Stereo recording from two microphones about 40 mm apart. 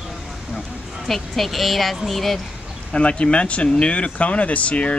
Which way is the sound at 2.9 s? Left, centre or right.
Left.